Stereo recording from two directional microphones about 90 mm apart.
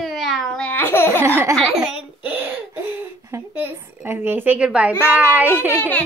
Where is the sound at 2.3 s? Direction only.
20° right (ahead or behind).